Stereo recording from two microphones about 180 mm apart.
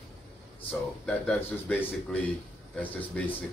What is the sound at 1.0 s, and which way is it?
A man's voice, 5° left (ahead or behind).